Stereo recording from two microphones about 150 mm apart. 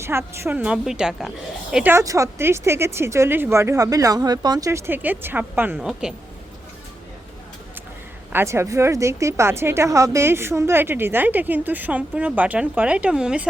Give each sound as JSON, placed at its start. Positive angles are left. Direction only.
{"t": 0.0, "sound": "speech", "side_deg": -15}
{"t": 8.3, "sound": "speech", "side_deg": -15}